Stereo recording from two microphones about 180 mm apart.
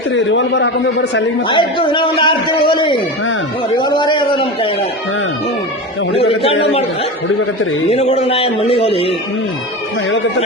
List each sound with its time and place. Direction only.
0.1 s a man's voice: 90° left
1.5 s a man's voice: 30° left (ahead or behind)
6.1 s speech: 30° left (ahead or behind)
7.9 s speech: 35° left (ahead or behind)